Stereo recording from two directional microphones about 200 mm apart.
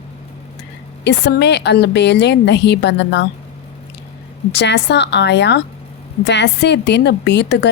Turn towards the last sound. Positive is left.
turn(degrees=60)  # may be behind; listen again after turning